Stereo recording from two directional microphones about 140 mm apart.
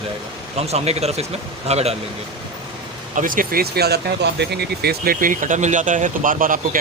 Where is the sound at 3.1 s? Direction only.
75° right (ahead or behind).